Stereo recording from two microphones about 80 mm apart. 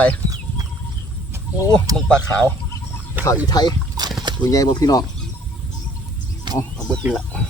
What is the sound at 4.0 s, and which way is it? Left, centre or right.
Rowboat, right.